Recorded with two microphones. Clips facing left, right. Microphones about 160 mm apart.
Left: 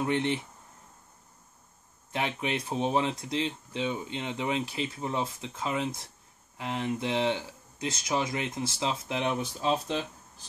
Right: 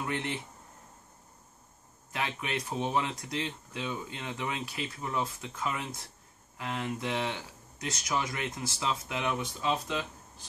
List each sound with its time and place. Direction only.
0.0 s speech: 25° left (ahead or behind)
2.1 s speech: 25° left (ahead or behind)